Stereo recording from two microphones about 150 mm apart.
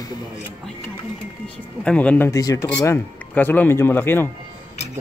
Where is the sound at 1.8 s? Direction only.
5° left (ahead or behind).